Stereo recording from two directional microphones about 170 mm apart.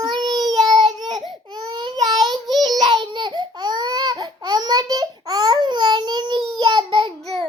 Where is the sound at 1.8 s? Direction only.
25° right (ahead or behind).